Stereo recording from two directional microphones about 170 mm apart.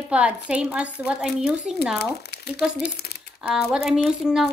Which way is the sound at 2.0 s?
75° left (ahead or behind).